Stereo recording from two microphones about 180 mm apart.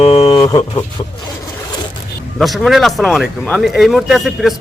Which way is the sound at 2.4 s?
Centre (ahead or behind).